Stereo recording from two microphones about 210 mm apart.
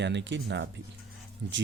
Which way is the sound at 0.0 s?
55° right (ahead or behind).